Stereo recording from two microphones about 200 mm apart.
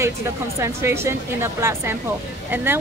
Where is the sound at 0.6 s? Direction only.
15° right (ahead or behind).